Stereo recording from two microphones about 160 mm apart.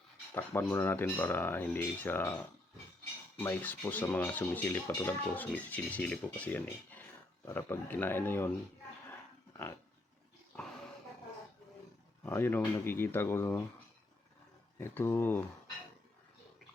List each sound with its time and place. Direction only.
0.3 s speech: 15° left (ahead or behind)
9.0 s dog: 15° left (ahead or behind)
12.2 s speech: 15° left (ahead or behind)
14.8 s speech: 15° left (ahead or behind)